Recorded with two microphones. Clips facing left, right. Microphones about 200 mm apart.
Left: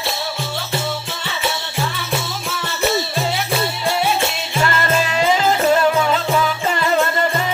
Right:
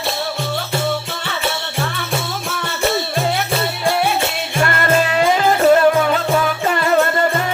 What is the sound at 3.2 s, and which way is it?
Music, 55° right (ahead or behind).